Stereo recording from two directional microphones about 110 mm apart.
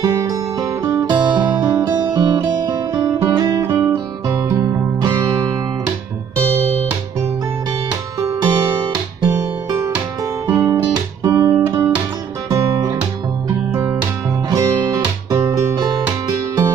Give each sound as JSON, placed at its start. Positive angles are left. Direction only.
{"t": 0.0, "sound": "music", "side_deg": -35}
{"t": 4.3, "sound": "music", "side_deg": -25}
{"t": 8.4, "sound": "guitar", "side_deg": -40}
{"t": 10.4, "sound": "guitar", "side_deg": -20}
{"t": 12.4, "sound": "guitar", "side_deg": -30}
{"t": 14.5, "sound": "music", "side_deg": -30}